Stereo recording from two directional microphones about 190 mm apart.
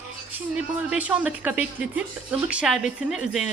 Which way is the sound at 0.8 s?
5° right (ahead or behind).